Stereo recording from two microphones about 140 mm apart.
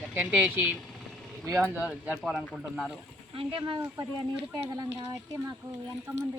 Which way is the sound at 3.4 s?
35° right (ahead or behind).